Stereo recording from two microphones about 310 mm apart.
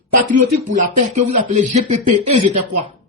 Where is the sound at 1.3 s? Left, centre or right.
Right.